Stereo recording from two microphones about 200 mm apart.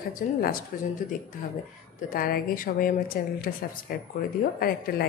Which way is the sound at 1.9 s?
45° left (ahead or behind).